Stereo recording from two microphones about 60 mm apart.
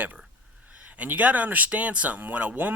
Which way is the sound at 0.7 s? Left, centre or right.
Right.